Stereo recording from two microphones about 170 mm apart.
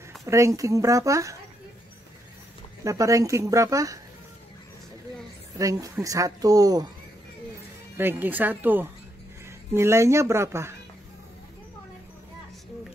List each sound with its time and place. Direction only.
0.2 s speech: 20° right (ahead or behind)
2.8 s speech: 20° right (ahead or behind)
5.6 s speech: 20° right (ahead or behind)
8.0 s speech: 10° right (ahead or behind)